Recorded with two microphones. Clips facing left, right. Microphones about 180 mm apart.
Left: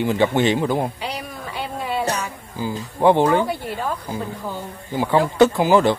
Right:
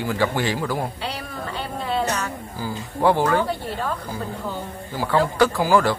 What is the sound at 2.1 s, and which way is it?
Music, 10° left (ahead or behind).